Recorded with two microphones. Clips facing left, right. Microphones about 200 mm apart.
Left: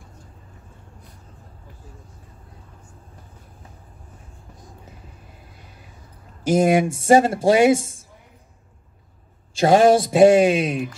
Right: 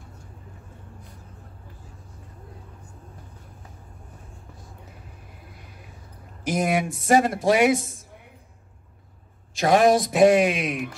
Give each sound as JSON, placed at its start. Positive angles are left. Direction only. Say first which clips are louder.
{"t": 6.4, "sound": "speech", "louder": "left 7 dB", "side_deg": 30}
{"t": 9.6, "sound": "speech", "louder": "left 4 dB", "side_deg": 30}